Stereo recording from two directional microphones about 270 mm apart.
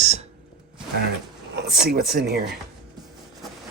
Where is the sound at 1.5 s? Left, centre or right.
Right.